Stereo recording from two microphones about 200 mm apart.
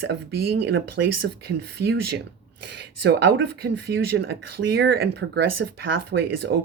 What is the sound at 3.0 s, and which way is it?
Speech, 60° right (ahead or behind).